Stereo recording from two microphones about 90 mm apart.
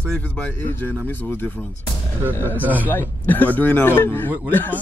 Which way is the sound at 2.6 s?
20° right (ahead or behind).